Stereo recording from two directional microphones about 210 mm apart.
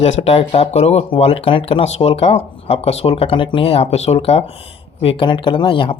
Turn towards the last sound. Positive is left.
turn(degrees=25)  # may be behind; listen again after turning